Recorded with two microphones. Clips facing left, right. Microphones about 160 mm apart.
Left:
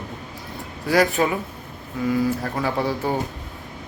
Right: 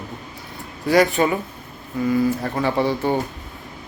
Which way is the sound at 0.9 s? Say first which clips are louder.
Right 2 dB; centre (ahead or behind).